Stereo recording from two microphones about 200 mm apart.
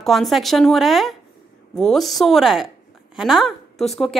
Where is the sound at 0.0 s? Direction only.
Centre (ahead or behind).